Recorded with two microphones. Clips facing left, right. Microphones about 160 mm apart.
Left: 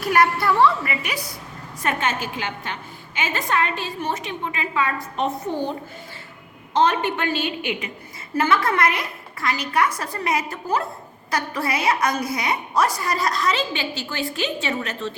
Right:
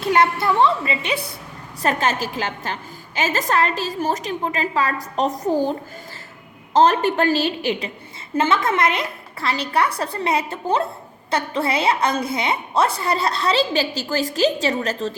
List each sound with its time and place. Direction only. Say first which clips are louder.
0.0 s a woman's voice: right 1 dB; 25° right (ahead or behind)
1.8 s a woman's voice: right 3 dB; 35° right (ahead or behind)
6.7 s a woman's voice: right 4 dB; 40° right (ahead or behind)
8.4 s a woman's voice: right 1 dB; 25° right (ahead or behind); by 15.1 s 40° right (ahead or behind)